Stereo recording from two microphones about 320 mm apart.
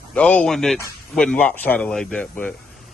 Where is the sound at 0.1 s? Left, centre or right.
Centre.